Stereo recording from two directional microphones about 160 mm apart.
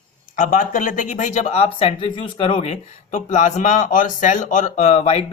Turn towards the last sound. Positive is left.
turn(degrees=40)  # may be behind; listen again after turning